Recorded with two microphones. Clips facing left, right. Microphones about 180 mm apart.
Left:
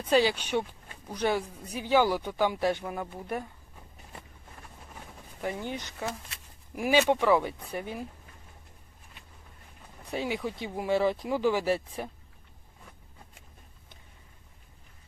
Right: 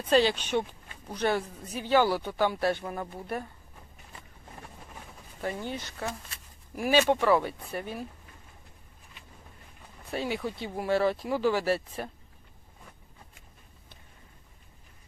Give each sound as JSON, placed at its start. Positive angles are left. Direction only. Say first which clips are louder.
{"t": 0.0, "sound": "speech", "louder": "right 1 dB", "side_deg": 10}
{"t": 5.4, "sound": "speech", "louder": "even", "side_deg": 15}
{"t": 10.1, "sound": "speech", "louder": "even", "side_deg": 15}